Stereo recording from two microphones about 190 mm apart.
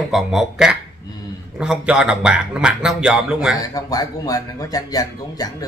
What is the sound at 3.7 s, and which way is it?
Speech, 20° left (ahead or behind).